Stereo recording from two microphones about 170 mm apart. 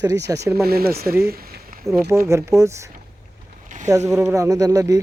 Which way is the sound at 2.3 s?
15° right (ahead or behind).